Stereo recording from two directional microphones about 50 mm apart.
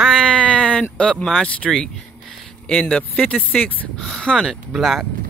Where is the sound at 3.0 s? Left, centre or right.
Left.